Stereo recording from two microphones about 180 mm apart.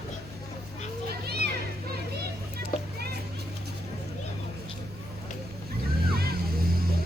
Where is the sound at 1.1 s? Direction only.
60° right (ahead or behind).